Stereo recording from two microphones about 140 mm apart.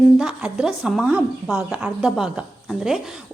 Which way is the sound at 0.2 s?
5° right (ahead or behind).